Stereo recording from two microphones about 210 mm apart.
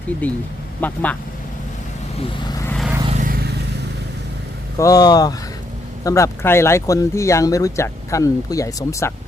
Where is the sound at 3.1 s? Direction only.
40° right (ahead or behind).